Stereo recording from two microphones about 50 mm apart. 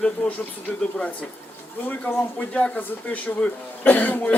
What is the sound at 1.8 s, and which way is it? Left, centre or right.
Speech, left.